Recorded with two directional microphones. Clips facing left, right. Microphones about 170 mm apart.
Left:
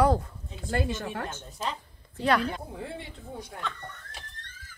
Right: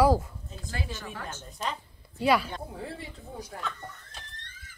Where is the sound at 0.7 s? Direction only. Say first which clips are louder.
Left 8 dB; 55° left (ahead or behind).